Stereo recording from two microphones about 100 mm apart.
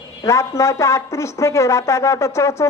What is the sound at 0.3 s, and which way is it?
A woman's voice, 30° left (ahead or behind).